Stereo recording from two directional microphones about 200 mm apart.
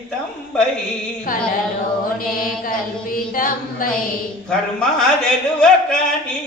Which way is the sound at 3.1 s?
45° left (ahead or behind).